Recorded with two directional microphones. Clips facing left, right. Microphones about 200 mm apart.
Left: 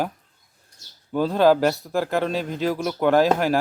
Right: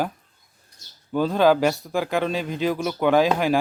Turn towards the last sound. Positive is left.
turn(degrees=0)  # may be behind; listen again after turning